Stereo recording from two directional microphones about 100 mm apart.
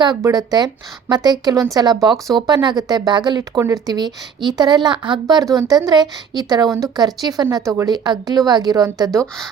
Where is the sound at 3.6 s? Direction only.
35° right (ahead or behind).